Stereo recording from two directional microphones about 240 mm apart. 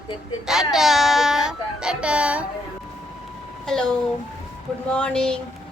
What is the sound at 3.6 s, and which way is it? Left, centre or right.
Speech, centre.